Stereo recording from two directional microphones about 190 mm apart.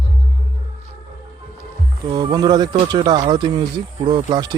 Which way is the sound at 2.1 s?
20° right (ahead or behind).